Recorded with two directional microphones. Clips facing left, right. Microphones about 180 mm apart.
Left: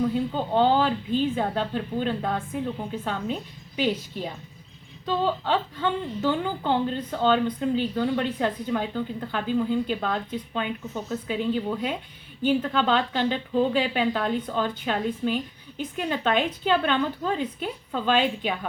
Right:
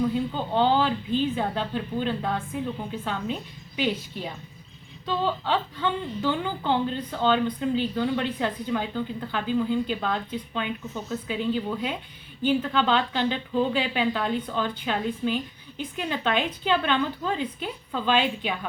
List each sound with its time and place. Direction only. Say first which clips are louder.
0.0 s a woman's voice: left 1 dB; 45° left (ahead or behind)